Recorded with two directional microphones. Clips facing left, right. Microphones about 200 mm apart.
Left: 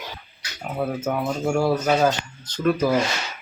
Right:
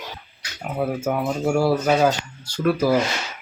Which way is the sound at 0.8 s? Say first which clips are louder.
Right 2 dB; 10° right (ahead or behind).